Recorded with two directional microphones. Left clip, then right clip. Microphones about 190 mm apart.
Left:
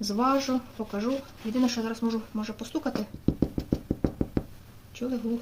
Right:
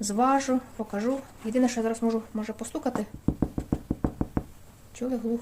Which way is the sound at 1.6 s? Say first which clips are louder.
Right 2 dB; 50° right (ahead or behind).